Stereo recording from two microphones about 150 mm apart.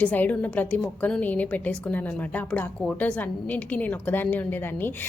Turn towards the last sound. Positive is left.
turn(degrees=15)  # may be behind; listen again after turning